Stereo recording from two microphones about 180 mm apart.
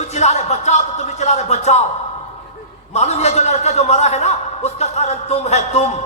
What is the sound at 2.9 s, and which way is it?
Music, 40° left (ahead or behind).